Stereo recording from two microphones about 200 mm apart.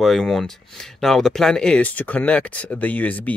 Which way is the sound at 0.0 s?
Centre (ahead or behind).